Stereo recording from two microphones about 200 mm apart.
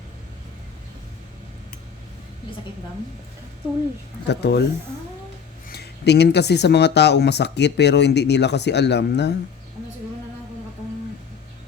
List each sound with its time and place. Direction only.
4.3 s speech: 55° left (ahead or behind)
5.7 s speech: 55° left (ahead or behind)